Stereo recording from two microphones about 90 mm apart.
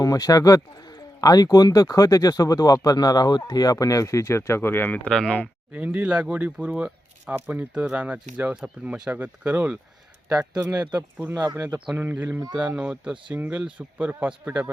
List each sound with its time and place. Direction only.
0.0 s speech: 45° left (ahead or behind); by 4.9 s 25° left (ahead or behind)
5.0 s speech: 10° left (ahead or behind)
5.7 s speech: 15° right (ahead or behind)
10.2 s speech: 45° right (ahead or behind)
11.5 s speech: 30° right (ahead or behind)
12.1 s speech: 20° right (ahead or behind)